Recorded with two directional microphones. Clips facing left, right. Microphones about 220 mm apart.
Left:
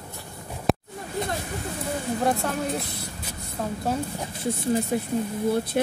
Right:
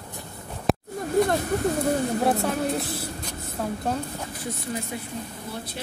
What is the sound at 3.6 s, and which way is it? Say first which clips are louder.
Speech: right 1 dB; centre (ahead or behind).